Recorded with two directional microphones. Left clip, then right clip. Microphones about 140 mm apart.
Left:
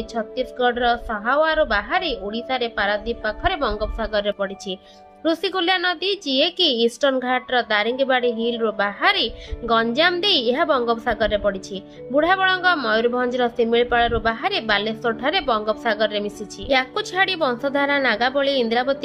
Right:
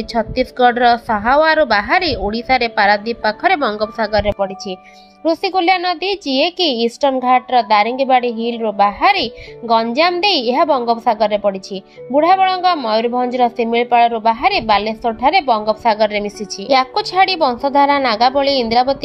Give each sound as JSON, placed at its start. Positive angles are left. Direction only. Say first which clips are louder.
{"t": 0.1, "sound": "a woman's voice", "louder": "right 9 dB", "side_deg": -40}
{"t": 5.2, "sound": "a woman's voice", "louder": "right 6 dB", "side_deg": -10}